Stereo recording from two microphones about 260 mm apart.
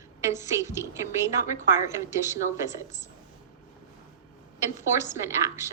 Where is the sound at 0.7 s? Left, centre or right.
Centre.